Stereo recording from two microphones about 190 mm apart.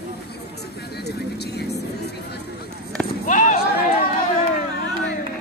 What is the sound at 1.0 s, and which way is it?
Vehicle, 60° left (ahead or behind).